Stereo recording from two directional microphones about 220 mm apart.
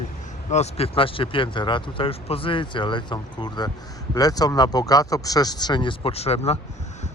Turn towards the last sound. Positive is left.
turn(degrees=30)  # may be behind; listen again after turning